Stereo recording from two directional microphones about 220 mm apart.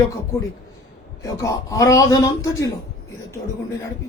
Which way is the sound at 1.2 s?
15° left (ahead or behind).